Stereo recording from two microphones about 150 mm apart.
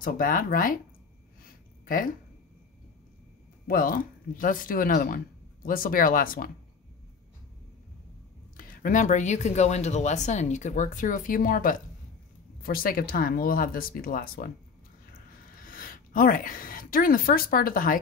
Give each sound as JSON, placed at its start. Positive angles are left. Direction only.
{"t": 0.0, "sound": "speech", "side_deg": 65}
{"t": 1.4, "sound": "a sound", "side_deg": 65}
{"t": 3.6, "sound": "speech", "side_deg": 70}
{"t": 8.5, "sound": "speech", "side_deg": 60}
{"t": 15.6, "sound": "a woman's voice", "side_deg": 70}